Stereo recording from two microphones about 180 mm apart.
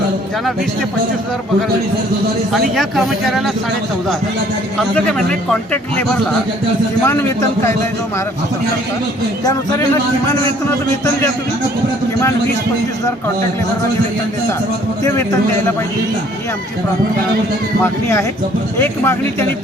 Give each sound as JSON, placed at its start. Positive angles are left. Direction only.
{"t": 2.5, "sound": "a man's voice", "side_deg": 0}
{"t": 4.8, "sound": "a man's voice", "side_deg": 5}
{"t": 9.4, "sound": "speech", "side_deg": 20}
{"t": 17.8, "sound": "a man's voice", "side_deg": 15}